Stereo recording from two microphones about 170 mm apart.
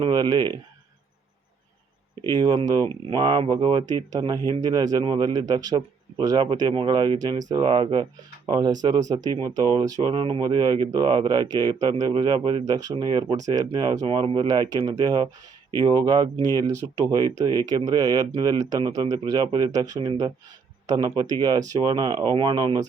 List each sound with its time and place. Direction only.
0.0 s speech: 25° right (ahead or behind)
2.2 s speech: 25° right (ahead or behind)